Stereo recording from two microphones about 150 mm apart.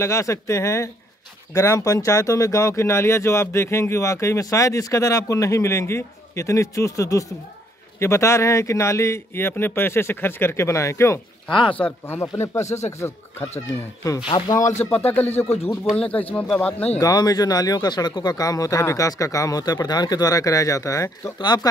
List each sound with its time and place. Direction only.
0.0 s a man's voice: 20° left (ahead or behind)
11.5 s speech: 35° left (ahead or behind)
11.8 s a man's voice: 15° left (ahead or behind)
12.6 s speech: 50° left (ahead or behind)
14.2 s speech: 30° left (ahead or behind)
15.0 s a man's voice: 15° left (ahead or behind)
17.0 s speech: 25° left (ahead or behind)